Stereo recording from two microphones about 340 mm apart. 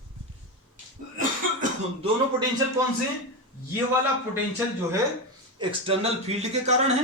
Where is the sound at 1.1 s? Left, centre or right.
Right.